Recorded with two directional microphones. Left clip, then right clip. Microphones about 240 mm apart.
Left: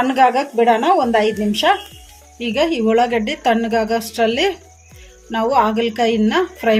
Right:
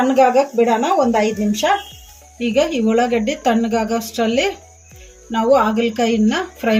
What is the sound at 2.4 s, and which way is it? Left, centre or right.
A woman's voice, left.